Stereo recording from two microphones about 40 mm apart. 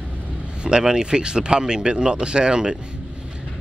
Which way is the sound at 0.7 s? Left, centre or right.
Right.